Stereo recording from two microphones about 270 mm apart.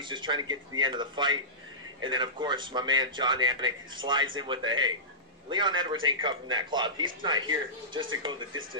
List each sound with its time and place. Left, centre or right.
0.0 s speech: centre